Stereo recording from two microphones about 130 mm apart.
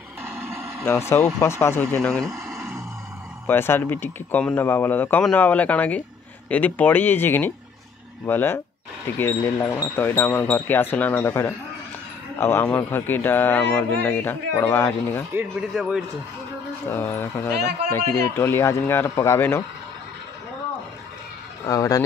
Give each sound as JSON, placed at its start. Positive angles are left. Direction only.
{"t": 0.2, "sound": "a sound", "side_deg": -15}
{"t": 0.8, "sound": "speech", "side_deg": 20}
{"t": 2.0, "sound": "speech", "side_deg": 5}
{"t": 3.4, "sound": "speech", "side_deg": 20}
{"t": 15.7, "sound": "a man's voice", "side_deg": 0}
{"t": 16.8, "sound": "speech", "side_deg": 15}
{"t": 21.6, "sound": "speech", "side_deg": 25}